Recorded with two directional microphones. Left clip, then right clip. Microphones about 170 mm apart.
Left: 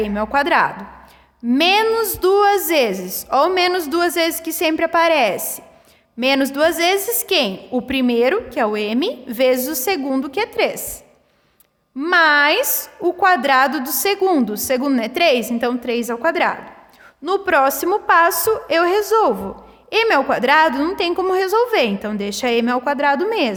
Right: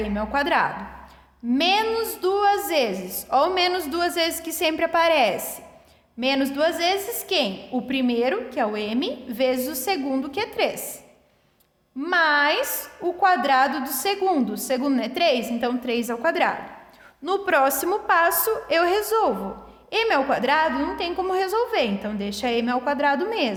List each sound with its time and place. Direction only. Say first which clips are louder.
0.0 s a woman's voice: left 6 dB; 35° left (ahead or behind)
11.9 s a woman's voice: left 6 dB; 35° left (ahead or behind)